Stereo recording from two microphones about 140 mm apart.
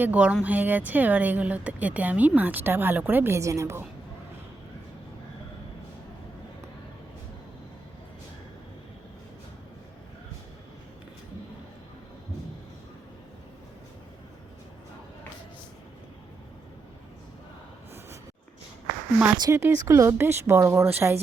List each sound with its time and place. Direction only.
0.0 s a woman's voice: 10° right (ahead or behind)
19.4 s speech: 20° right (ahead or behind)